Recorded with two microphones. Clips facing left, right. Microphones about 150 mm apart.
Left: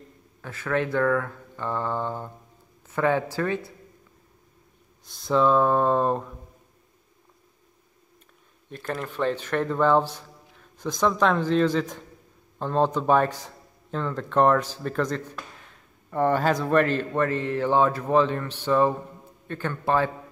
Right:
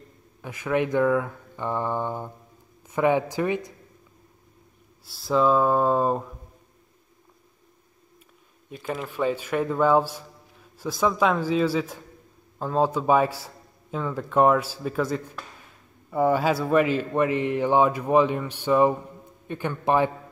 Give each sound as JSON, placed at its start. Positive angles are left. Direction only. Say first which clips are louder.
{"t": 0.4, "sound": "a man's voice", "louder": "right 2 dB", "side_deg": -15}
{"t": 5.0, "sound": "speech", "louder": "even", "side_deg": -5}
{"t": 8.6, "sound": "a man's voice", "louder": "even", "side_deg": -5}